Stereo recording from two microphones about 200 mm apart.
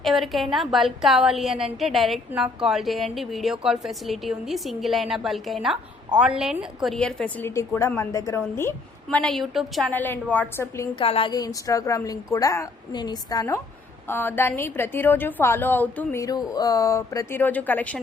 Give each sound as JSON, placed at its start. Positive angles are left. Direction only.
{"t": 0.0, "sound": "a woman's voice", "side_deg": 0}
{"t": 10.9, "sound": "a woman's voice", "side_deg": 25}